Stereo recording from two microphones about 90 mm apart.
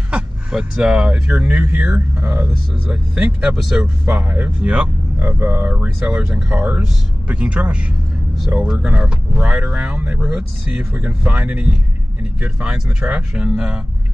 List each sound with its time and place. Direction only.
0.1 s speech: 10° right (ahead or behind)
4.0 s speech: 20° right (ahead or behind)